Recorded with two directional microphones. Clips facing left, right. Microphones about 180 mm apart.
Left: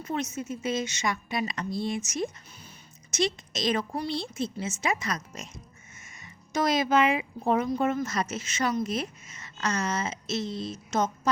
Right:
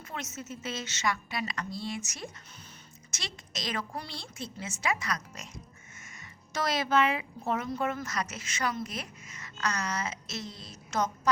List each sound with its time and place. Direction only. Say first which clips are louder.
0.0 s speech: left 9 dB; 20° left (ahead or behind)
6.5 s speech: left 4 dB; 15° left (ahead or behind)